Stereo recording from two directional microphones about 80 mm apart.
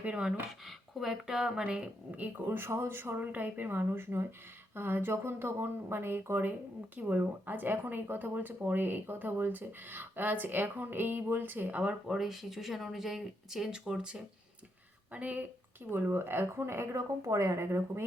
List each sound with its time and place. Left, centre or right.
0.0 s speech: centre
0.6 s speech: centre; by 18.0 s right